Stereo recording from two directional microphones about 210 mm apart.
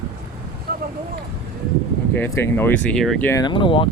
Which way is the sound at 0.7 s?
45° right (ahead or behind).